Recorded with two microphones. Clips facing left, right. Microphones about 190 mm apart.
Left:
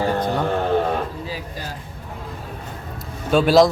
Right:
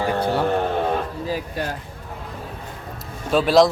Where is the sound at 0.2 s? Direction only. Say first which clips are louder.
Right 1 dB; 5° right (ahead or behind).